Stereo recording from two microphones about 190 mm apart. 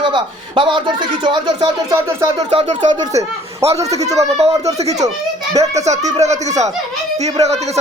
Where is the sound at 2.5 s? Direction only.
35° right (ahead or behind).